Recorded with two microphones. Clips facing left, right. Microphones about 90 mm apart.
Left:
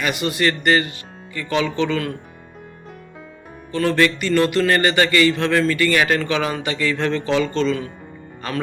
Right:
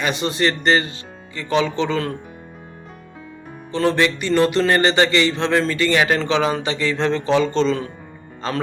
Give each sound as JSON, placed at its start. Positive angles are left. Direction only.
{"t": 0.0, "sound": "a man's voice", "side_deg": -25}
{"t": 3.7, "sound": "a man's voice", "side_deg": -20}